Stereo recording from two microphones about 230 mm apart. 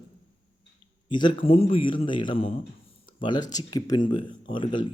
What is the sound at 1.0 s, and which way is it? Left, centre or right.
Speech, left.